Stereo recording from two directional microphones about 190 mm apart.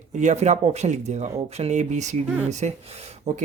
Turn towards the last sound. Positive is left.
turn(degrees=-35)  # may be behind; listen again after turning